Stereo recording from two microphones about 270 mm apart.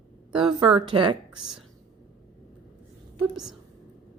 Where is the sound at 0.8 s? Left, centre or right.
Centre.